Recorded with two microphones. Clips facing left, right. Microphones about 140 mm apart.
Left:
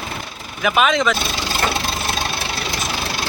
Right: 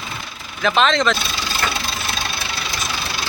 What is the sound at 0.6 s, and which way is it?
Speech, 10° left (ahead or behind).